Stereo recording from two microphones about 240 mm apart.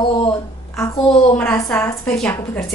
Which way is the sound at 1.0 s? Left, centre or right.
Centre.